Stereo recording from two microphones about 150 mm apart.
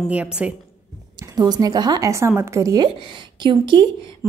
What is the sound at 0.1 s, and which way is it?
Speech, 10° right (ahead or behind).